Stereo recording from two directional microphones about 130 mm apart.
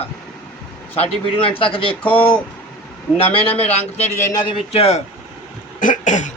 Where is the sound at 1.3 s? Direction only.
45° left (ahead or behind).